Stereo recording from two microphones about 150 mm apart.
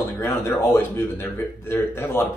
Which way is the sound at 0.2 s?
20° left (ahead or behind).